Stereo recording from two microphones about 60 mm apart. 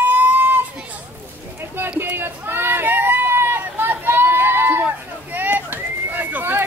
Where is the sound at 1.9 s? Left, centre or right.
Right.